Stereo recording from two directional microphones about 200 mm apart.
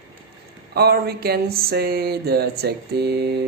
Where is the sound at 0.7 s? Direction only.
50° right (ahead or behind).